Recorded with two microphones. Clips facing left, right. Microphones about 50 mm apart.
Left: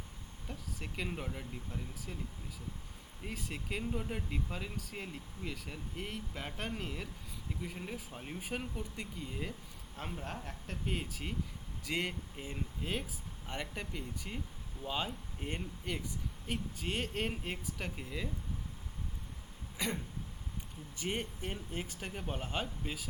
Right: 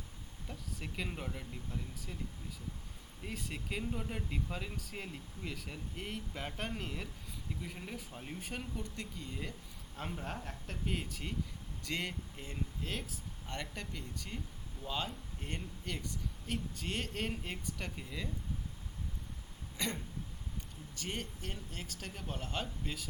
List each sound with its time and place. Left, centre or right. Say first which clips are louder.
0.4 s speech: left 1 dB; centre
3.2 s speech: left 1 dB; centre
19.8 s speech: left 1 dB; centre
20.9 s speech: left 4 dB; left